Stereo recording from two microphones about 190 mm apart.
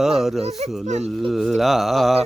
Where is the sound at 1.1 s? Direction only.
Centre (ahead or behind).